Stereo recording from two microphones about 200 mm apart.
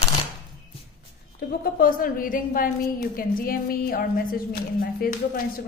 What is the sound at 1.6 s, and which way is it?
A woman's voice, 45° left (ahead or behind).